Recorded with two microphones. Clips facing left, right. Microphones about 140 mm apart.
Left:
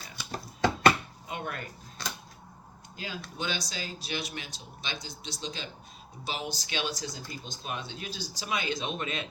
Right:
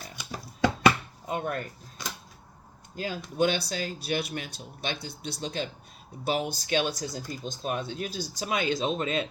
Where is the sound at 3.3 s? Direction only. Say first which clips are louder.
Right 11 dB; 55° right (ahead or behind).